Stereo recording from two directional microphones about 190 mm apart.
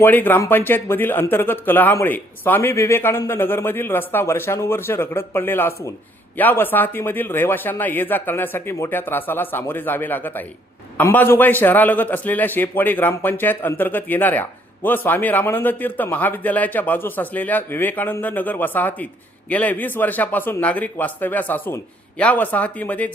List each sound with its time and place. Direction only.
0.0 s a man's voice: 10° left (ahead or behind)